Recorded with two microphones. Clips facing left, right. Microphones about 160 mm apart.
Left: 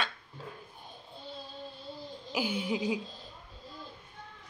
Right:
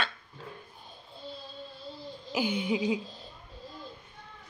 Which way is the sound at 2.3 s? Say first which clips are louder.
Right 3 dB; 5° left (ahead or behind).